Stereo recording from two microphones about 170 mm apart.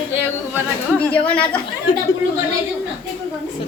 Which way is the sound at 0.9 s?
10° left (ahead or behind).